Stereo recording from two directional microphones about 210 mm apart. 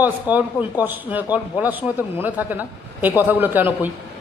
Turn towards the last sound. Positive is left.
turn(degrees=-10)  # may be behind; listen again after turning